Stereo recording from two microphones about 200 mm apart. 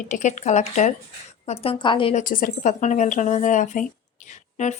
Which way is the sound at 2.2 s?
40° left (ahead or behind).